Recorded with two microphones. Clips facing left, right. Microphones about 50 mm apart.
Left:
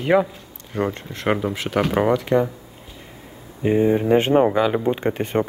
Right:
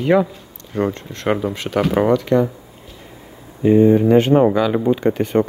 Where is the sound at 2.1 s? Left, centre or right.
Centre.